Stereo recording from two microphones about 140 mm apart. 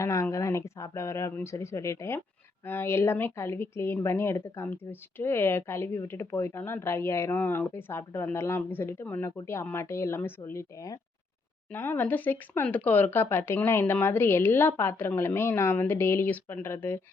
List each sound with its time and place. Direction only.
0.0 s a woman's voice: 20° left (ahead or behind)
11.7 s a woman's voice: 15° left (ahead or behind)